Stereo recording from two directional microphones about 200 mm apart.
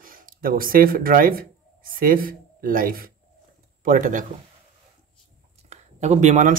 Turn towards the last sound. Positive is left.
turn(degrees=-40)  # may be behind; listen again after turning